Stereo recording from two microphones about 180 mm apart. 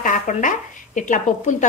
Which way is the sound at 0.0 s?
45° left (ahead or behind).